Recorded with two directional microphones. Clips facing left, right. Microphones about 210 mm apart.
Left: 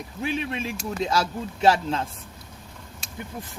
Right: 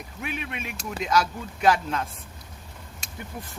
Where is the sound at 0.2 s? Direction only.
30° left (ahead or behind).